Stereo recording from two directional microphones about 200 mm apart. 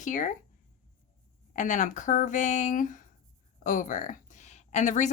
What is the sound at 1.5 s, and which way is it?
Speech, 40° left (ahead or behind).